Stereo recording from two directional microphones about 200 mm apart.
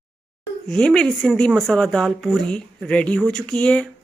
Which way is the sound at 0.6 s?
5° left (ahead or behind).